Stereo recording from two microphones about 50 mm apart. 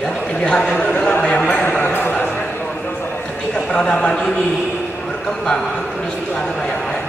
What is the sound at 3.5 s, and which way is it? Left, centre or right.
Speech, centre.